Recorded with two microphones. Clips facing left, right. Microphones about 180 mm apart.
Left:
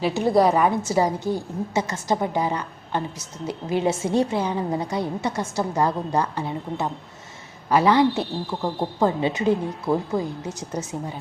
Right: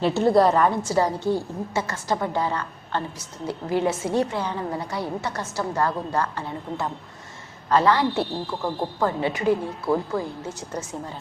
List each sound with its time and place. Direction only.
0.0 s a woman's voice: 15° left (ahead or behind)